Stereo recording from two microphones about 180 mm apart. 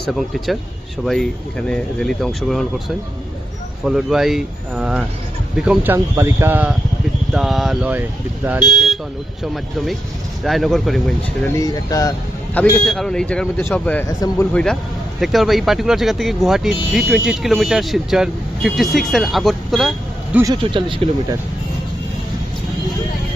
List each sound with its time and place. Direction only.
0.0 s speech: centre (ahead or behind)
3.8 s speech: centre (ahead or behind)
11.4 s speech: 20° left (ahead or behind)
12.5 s speech: 5° left (ahead or behind)
14.1 s speech: 20° left (ahead or behind)
14.5 s speech: 5° left (ahead or behind)
20.3 s speech: 20° right (ahead or behind)